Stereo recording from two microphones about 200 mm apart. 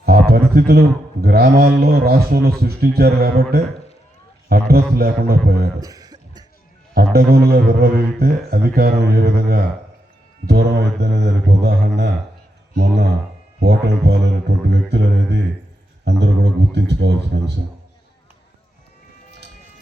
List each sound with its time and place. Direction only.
0.0 s a man's voice: 50° right (ahead or behind)
5.8 s a sound: 20° right (ahead or behind)
6.9 s a man's voice: 50° right (ahead or behind)
10.4 s mantra: 55° right (ahead or behind)